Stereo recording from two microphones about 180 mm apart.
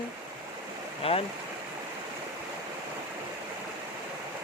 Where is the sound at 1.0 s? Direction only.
30° left (ahead or behind).